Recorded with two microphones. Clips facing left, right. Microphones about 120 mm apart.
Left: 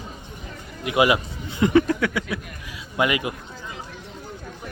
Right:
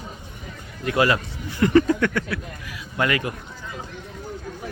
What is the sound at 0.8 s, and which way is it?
Speech, 15° left (ahead or behind).